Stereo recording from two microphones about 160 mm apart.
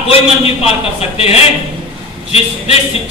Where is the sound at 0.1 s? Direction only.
40° left (ahead or behind).